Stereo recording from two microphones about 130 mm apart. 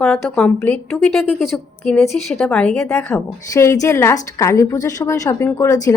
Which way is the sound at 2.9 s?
20° left (ahead or behind).